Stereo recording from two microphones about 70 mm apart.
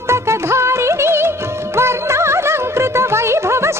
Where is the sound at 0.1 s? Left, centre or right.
Right.